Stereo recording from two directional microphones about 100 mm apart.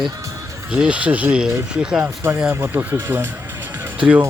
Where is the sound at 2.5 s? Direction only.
25° right (ahead or behind).